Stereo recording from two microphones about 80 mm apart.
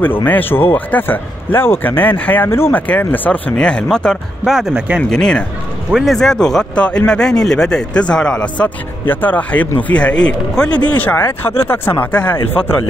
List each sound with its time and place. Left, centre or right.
0.0 s speech: left
2.9 s speech: centre
4.5 s speech: centre
5.1 s speech: centre
5.9 s speech: centre
6.1 s speech: centre